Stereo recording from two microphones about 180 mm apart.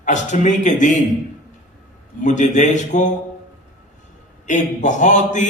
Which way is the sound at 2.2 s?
45° left (ahead or behind).